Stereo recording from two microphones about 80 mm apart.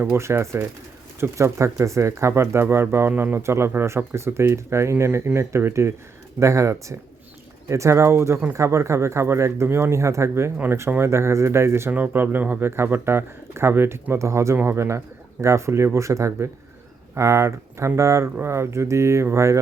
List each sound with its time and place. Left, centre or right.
0.0 s speech: right